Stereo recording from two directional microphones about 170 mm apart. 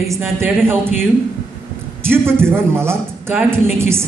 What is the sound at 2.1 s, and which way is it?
A man's voice, 15° right (ahead or behind).